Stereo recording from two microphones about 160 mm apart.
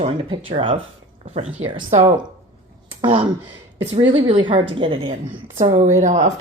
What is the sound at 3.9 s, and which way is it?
Speech, 30° right (ahead or behind).